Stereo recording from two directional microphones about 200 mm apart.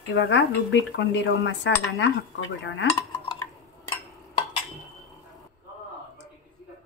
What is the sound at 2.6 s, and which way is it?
Cutlery, 70° left (ahead or behind).